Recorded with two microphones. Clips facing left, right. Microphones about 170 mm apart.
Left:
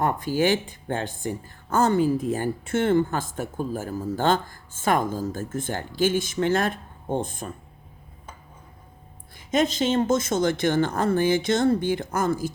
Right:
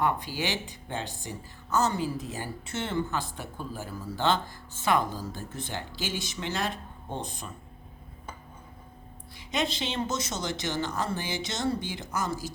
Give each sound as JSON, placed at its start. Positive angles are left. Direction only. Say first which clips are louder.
{"t": 0.0, "sound": "speech", "louder": "left 6 dB", "side_deg": 45}
{"t": 9.5, "sound": "speech", "louder": "left 9 dB", "side_deg": 45}